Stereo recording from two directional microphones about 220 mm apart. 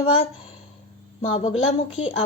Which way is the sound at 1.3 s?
25° left (ahead or behind).